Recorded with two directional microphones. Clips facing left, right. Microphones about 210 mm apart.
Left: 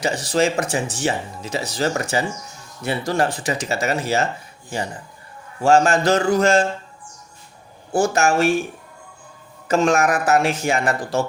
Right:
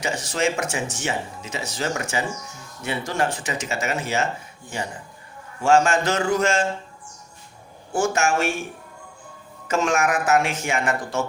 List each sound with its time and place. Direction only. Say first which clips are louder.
0.0 s speech: left 4 dB; 35° left (ahead or behind)
5.6 s speech: left 3 dB; 35° left (ahead or behind)
7.9 s speech: left 4 dB; 35° left (ahead or behind)
9.6 s speech: left 4 dB; 35° left (ahead or behind)